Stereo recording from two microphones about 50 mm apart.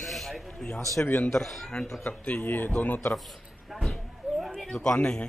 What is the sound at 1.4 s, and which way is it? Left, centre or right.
Speech, centre.